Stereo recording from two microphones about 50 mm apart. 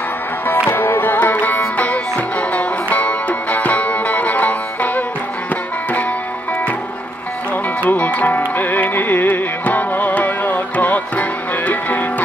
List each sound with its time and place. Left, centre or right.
0.5 s music: left
7.8 s music: left